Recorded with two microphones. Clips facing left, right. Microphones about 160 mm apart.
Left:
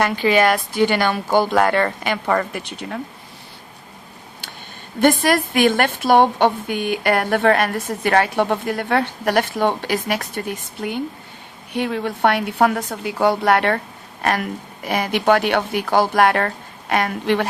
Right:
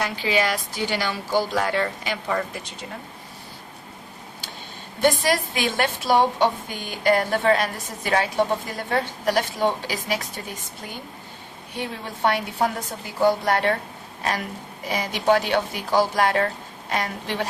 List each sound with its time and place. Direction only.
0.0 s a woman's voice: 60° left (ahead or behind)
4.9 s a woman's voice: 55° left (ahead or behind)